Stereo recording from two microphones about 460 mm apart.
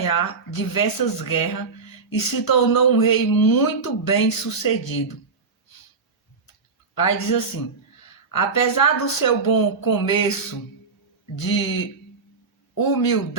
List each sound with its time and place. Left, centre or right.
0.0 s speech: left
6.9 s speech: left
11.3 s speech: left